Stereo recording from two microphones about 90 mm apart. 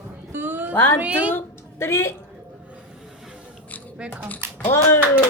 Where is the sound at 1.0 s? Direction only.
15° right (ahead or behind).